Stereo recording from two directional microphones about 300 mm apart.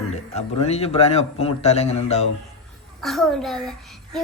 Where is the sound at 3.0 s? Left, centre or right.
Centre.